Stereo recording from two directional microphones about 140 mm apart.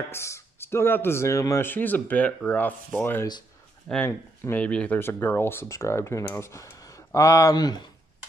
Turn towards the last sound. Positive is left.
turn(degrees=30)  # may be behind; listen again after turning